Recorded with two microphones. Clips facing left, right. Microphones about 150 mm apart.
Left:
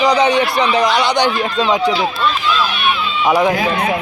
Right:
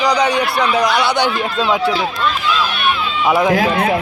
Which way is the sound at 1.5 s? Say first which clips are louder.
Left 1 dB; 5° right (ahead or behind).